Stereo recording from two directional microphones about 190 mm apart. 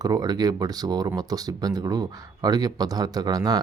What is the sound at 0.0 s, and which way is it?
Speech, 20° right (ahead or behind).